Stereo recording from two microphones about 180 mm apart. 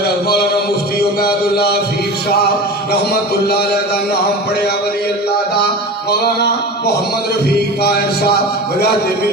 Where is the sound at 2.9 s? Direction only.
60° left (ahead or behind).